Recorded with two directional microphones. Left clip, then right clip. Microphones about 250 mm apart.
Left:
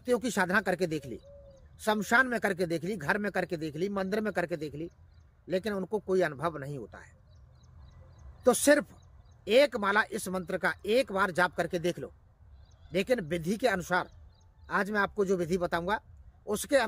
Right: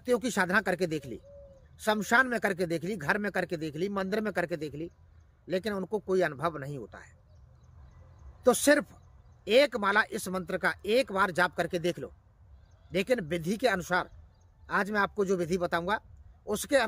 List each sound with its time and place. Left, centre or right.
0.0 s speech: centre
8.4 s speech: centre